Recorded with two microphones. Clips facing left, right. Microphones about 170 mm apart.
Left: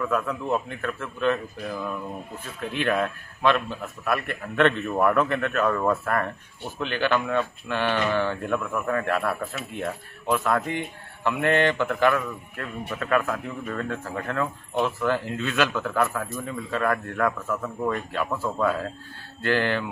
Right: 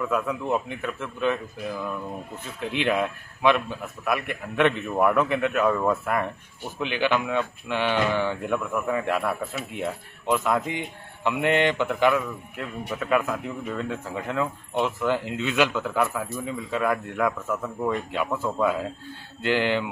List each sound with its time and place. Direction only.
0.0 s speech: 5° right (ahead or behind)
2.7 s speech: 15° right (ahead or behind)